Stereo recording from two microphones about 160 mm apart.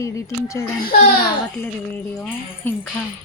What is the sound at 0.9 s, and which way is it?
Speech, 70° left (ahead or behind).